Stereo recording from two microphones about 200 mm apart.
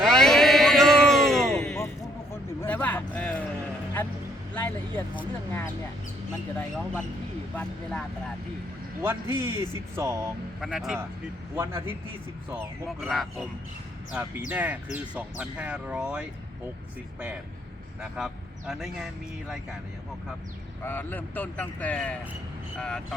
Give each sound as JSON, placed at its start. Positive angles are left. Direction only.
{"t": 0.0, "sound": "a sound", "side_deg": 0}
{"t": 4.5, "sound": "speech", "side_deg": 10}
{"t": 7.5, "sound": "speech", "side_deg": 5}
{"t": 9.0, "sound": "speech", "side_deg": -10}
{"t": 10.6, "sound": "speech", "side_deg": 0}
{"t": 13.0, "sound": "speech", "side_deg": 0}
{"t": 18.2, "sound": "speech", "side_deg": -5}
{"t": 20.8, "sound": "speech", "side_deg": 10}